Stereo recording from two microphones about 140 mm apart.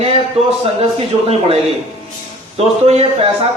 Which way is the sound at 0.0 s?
45° right (ahead or behind).